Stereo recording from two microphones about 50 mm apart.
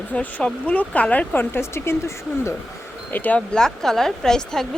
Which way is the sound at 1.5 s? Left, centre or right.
Left.